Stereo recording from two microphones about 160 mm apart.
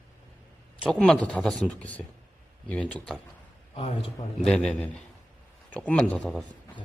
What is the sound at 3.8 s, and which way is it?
Speech, 35° left (ahead or behind).